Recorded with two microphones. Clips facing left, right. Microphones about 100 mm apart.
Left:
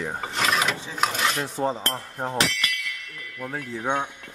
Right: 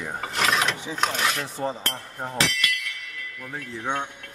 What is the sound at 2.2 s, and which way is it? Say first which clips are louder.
Speech: left 1 dB; 25° left (ahead or behind).